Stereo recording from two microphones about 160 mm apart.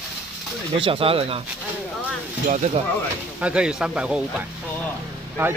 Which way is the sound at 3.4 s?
5° right (ahead or behind).